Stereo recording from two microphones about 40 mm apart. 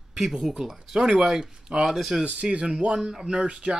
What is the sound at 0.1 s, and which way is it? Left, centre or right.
Speech, centre.